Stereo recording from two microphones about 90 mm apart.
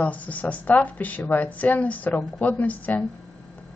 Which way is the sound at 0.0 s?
15° left (ahead or behind).